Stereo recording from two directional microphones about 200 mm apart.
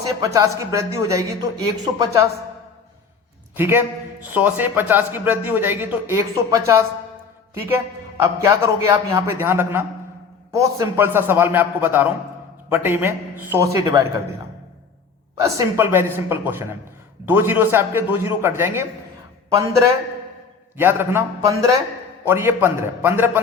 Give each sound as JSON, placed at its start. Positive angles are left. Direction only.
{"t": 0.1, "sound": "a man's voice", "side_deg": -15}
{"t": 3.5, "sound": "a man's voice", "side_deg": -10}
{"t": 8.2, "sound": "a man's voice", "side_deg": -15}
{"t": 15.4, "sound": "a man's voice", "side_deg": -15}
{"t": 20.7, "sound": "a man's voice", "side_deg": -10}